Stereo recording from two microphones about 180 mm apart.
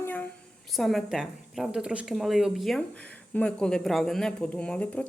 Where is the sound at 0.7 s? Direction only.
Centre (ahead or behind).